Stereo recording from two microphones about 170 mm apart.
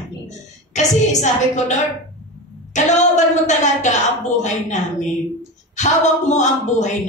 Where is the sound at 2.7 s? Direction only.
45° left (ahead or behind).